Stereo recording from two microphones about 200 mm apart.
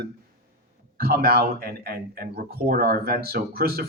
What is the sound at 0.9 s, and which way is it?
Speech, 50° right (ahead or behind).